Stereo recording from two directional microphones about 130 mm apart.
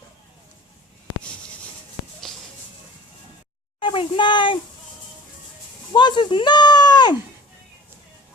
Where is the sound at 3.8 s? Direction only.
40° left (ahead or behind).